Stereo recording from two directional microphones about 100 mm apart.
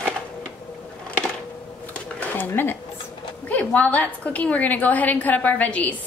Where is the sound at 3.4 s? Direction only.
15° left (ahead or behind).